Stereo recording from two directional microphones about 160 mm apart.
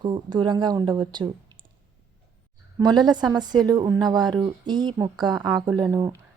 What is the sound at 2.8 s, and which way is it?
A woman's voice, 25° right (ahead or behind).